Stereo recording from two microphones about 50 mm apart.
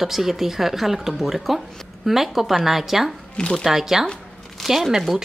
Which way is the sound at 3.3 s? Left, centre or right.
Centre.